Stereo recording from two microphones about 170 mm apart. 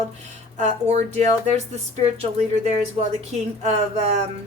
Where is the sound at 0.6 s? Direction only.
40° right (ahead or behind).